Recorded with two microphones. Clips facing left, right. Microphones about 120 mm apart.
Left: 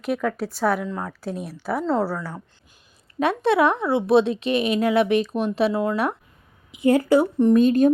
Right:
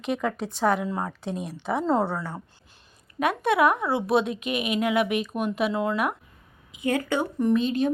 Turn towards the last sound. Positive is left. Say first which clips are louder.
# left 8 dB
turn(degrees=45)  # may be behind; listen again after turning